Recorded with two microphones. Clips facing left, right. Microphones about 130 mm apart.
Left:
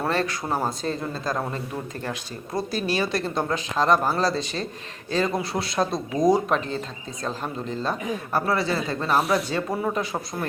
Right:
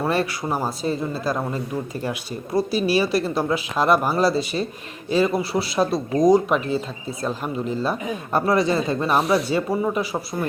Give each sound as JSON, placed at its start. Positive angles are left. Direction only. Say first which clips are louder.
{"t": 0.4, "sound": "speech", "louder": "right 2 dB", "side_deg": -5}
{"t": 8.3, "sound": "speech", "louder": "right 5 dB", "side_deg": -20}